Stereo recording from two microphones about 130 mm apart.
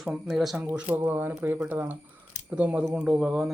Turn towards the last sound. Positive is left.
turn(degrees=-5)  # may be behind; listen again after turning